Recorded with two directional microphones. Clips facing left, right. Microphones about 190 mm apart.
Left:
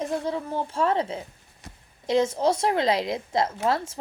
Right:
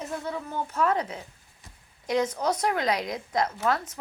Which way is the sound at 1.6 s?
75° left (ahead or behind).